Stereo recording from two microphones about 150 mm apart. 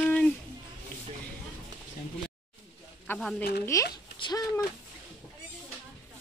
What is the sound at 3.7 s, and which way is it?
Speech, 20° left (ahead or behind).